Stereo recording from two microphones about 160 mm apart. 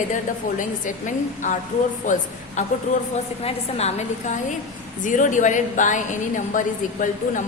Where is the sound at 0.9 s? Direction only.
50° left (ahead or behind).